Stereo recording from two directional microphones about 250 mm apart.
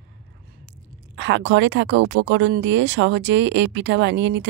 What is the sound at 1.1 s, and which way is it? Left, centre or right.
Speech, right.